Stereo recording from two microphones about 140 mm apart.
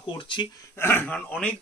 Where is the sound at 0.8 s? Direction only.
15° left (ahead or behind).